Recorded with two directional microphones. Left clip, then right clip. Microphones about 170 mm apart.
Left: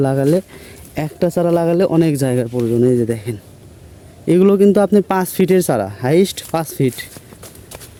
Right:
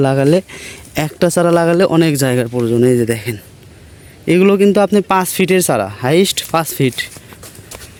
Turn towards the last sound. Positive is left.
turn(degrees=5)  # may be behind; listen again after turning